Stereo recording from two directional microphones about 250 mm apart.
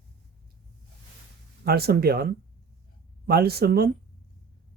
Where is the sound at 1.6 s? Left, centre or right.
Right.